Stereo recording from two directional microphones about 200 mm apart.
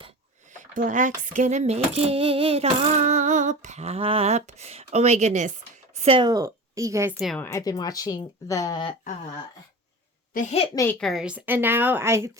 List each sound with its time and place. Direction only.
0.5 s a woman's voice: 40° right (ahead or behind); by 7.1 s 15° right (ahead or behind)
7.1 s a woman's voice: 5° left (ahead or behind)
7.4 s speech: 15° left (ahead or behind)
10.3 s a woman's voice: 35° left (ahead or behind)
10.8 s speech: 10° left (ahead or behind); by 12.3 s 15° right (ahead or behind)